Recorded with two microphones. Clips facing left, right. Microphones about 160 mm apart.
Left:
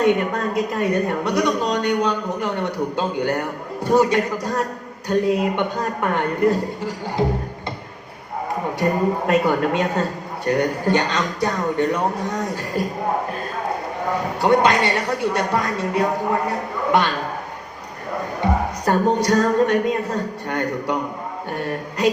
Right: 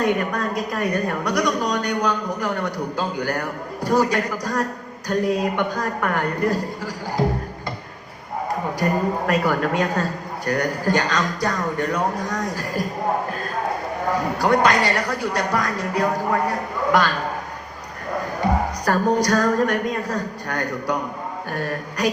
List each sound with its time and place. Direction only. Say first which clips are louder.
0.0 s a woman's voice: left 3 dB; 25° left (ahead or behind)
8.8 s a woman's voice: left 2 dB; 25° left (ahead or behind)
14.4 s a woman's voice: left 2 dB; 25° left (ahead or behind)
18.9 s a woman's voice: left 1 dB; 25° left (ahead or behind)